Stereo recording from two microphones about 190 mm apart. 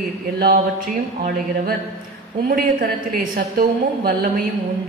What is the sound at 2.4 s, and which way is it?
A woman's voice, 50° right (ahead or behind).